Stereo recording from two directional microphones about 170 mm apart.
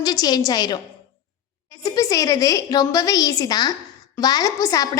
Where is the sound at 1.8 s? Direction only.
20° left (ahead or behind).